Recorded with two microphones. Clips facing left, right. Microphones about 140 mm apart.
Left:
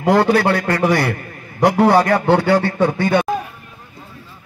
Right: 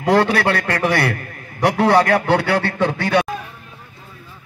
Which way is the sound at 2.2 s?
75° right (ahead or behind).